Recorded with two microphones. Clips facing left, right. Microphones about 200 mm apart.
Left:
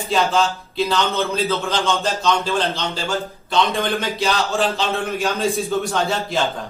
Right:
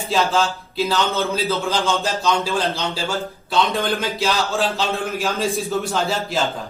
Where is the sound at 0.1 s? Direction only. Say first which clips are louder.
Left 1 dB; centre (ahead or behind).